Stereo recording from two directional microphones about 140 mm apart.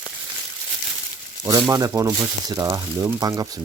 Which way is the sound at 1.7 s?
25° right (ahead or behind).